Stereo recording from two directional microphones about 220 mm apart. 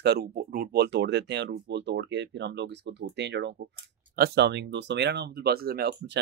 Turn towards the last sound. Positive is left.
turn(degrees=-45)  # may be behind; listen again after turning